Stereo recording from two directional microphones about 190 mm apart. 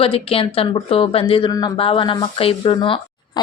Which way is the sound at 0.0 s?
30° left (ahead or behind).